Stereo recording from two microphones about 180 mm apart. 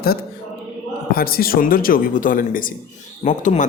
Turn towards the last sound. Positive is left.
turn(degrees=45)  # may be behind; listen again after turning